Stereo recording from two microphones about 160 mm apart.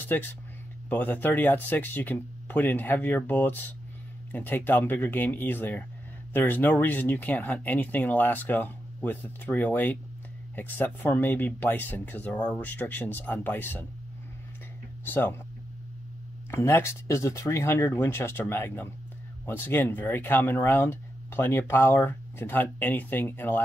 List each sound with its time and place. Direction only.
0.8 s speech: 10° left (ahead or behind)
15.0 s speech: 15° left (ahead or behind)
16.4 s speech: 15° left (ahead or behind)